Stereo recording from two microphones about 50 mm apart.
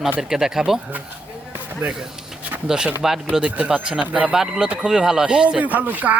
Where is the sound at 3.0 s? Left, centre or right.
Centre.